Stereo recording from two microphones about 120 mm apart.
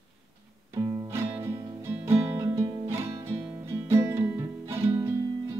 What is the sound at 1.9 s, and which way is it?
Music, 25° right (ahead or behind).